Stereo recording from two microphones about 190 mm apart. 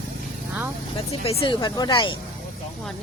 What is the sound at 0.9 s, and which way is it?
A woman's voice, 30° left (ahead or behind).